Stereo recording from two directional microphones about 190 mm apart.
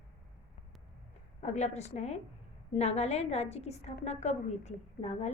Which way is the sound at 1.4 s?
35° left (ahead or behind).